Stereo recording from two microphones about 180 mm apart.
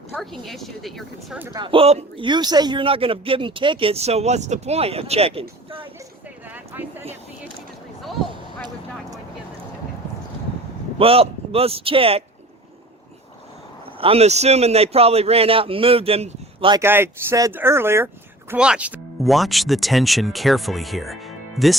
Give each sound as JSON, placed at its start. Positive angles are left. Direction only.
{"t": 0.1, "sound": "speech", "side_deg": 0}
{"t": 1.5, "sound": "speech", "side_deg": -30}
{"t": 6.5, "sound": "a sound", "side_deg": -10}
{"t": 8.6, "sound": "vehicle", "side_deg": -20}
{"t": 10.9, "sound": "speech", "side_deg": -30}
{"t": 14.0, "sound": "speech", "side_deg": -35}
{"t": 16.8, "sound": "speech", "side_deg": -15}